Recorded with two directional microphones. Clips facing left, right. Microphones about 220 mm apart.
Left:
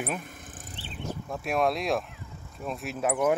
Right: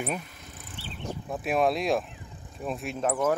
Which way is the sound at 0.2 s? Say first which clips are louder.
Left 2 dB; 50° left (ahead or behind).